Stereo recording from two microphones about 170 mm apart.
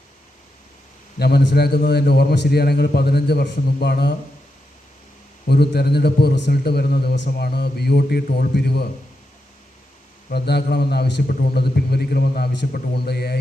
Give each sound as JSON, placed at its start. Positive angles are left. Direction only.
{"t": 1.2, "sound": "a man's voice", "side_deg": 70}
{"t": 5.5, "sound": "a man's voice", "side_deg": 70}
{"t": 10.2, "sound": "a man's voice", "side_deg": 70}